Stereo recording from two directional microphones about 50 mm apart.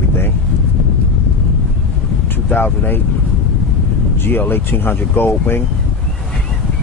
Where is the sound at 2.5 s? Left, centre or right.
Left.